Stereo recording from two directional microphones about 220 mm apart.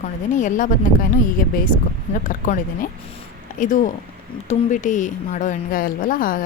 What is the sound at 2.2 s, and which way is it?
A woman's voice, 35° left (ahead or behind).